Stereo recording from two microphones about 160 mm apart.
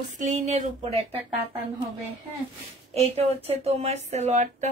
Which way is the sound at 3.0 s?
40° right (ahead or behind).